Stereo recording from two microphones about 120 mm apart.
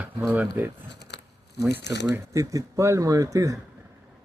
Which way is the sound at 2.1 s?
25° right (ahead or behind).